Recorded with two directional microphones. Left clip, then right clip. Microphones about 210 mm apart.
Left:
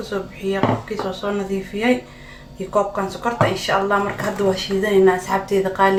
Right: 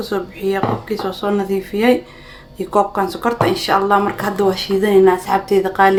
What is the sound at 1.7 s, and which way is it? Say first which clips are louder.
Speech: right 5 dB; 50° right (ahead or behind).